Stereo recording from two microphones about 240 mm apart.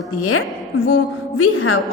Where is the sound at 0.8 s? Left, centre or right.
Left.